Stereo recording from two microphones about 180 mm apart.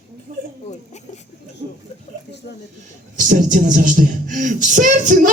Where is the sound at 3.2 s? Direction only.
45° right (ahead or behind).